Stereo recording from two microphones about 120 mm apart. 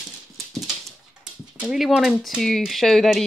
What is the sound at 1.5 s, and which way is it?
Speech, 5° right (ahead or behind).